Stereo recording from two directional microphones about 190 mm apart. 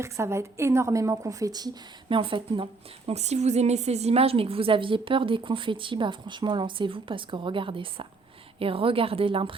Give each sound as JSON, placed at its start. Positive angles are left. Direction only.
{"t": 0.0, "sound": "a woman's voice", "side_deg": -15}